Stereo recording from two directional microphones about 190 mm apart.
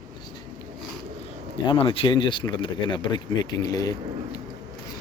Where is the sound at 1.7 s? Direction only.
30° left (ahead or behind).